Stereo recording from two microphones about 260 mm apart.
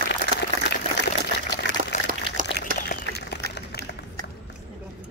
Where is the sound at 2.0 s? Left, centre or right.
Right.